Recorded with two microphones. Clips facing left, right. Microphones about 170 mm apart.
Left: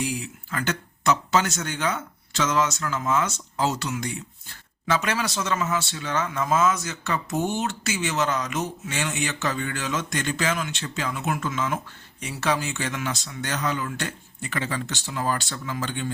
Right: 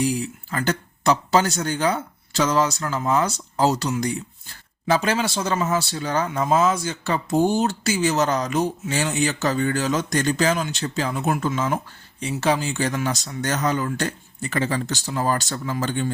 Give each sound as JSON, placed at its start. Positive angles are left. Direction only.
{"t": 0.0, "sound": "speech", "side_deg": -35}